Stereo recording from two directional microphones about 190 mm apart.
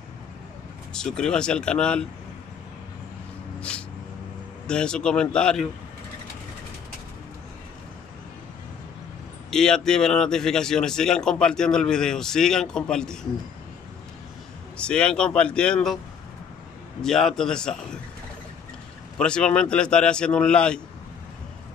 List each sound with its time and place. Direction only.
0.9 s speech: 5° left (ahead or behind)
4.6 s speech: 5° left (ahead or behind)
9.5 s speech: 5° left (ahead or behind)
14.8 s speech: 5° left (ahead or behind)
17.0 s speech: centre (ahead or behind)
19.1 s speech: 5° left (ahead or behind)